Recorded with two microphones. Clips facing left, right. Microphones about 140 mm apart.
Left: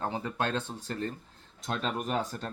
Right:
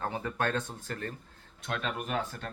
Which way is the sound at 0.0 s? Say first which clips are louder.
Even; 20° left (ahead or behind).